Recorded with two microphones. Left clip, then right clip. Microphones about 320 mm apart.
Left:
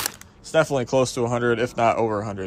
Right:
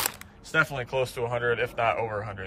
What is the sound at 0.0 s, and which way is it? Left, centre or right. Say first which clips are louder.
Speech: left 2 dB; centre.